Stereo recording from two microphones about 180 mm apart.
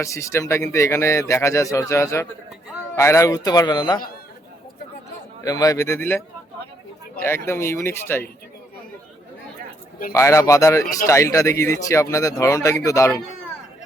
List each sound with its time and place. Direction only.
0.0 s a man's voice: 15° left (ahead or behind)
5.5 s speech: 20° left (ahead or behind)
10.1 s speech: 15° left (ahead or behind)